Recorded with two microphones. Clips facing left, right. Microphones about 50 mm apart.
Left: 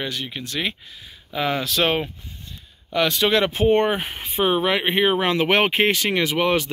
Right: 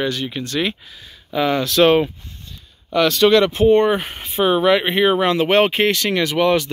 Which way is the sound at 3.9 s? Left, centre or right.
Centre.